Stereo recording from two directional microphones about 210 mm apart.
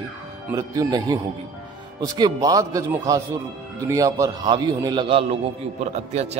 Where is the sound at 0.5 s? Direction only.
15° right (ahead or behind).